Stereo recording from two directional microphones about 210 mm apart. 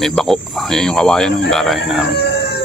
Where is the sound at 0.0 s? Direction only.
Centre (ahead or behind).